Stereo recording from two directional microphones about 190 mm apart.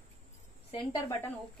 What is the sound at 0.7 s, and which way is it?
Speech, 20° left (ahead or behind).